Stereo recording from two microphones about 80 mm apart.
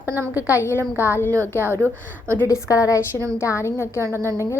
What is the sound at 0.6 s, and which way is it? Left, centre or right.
Speech, left.